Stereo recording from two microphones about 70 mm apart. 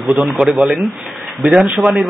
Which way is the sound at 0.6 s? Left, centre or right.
Centre.